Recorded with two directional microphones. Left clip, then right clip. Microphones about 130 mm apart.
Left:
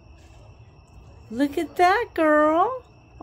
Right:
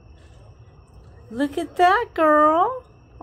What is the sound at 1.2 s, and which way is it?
A woman's voice, 20° left (ahead or behind).